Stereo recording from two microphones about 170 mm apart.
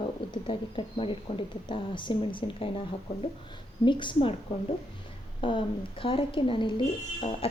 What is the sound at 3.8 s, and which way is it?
Speech, 25° left (ahead or behind).